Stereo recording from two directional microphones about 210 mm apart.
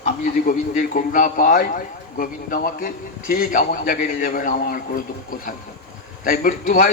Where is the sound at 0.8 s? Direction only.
40° left (ahead or behind).